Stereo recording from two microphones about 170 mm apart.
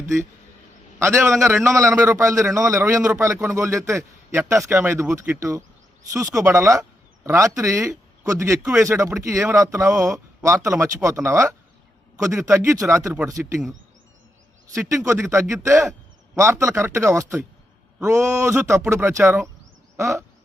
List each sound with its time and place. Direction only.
1.2 s a man's voice: 15° right (ahead or behind)
14.8 s a man's voice: 20° right (ahead or behind)